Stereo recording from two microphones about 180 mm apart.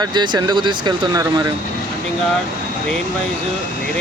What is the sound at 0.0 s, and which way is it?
Speech, 25° right (ahead or behind).